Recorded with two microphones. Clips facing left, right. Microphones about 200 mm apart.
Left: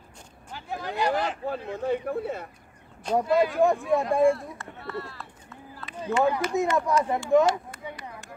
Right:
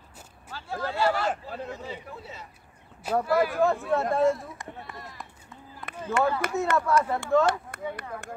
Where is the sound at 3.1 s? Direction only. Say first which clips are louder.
Left 2 dB; 20° left (ahead or behind).